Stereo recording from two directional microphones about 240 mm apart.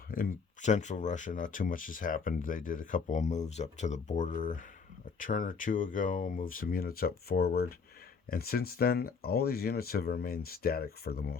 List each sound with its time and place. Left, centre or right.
0.1 s speech: left